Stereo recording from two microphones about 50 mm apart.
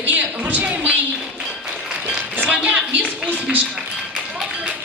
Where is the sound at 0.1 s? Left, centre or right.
Right.